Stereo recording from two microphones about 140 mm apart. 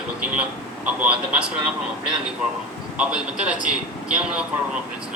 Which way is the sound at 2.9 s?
5° right (ahead or behind).